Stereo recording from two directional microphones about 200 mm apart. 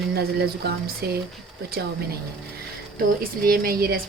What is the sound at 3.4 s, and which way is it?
Speech, 50° right (ahead or behind).